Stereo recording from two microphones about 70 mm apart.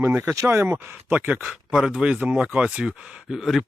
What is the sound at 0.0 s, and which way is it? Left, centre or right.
Speech, right.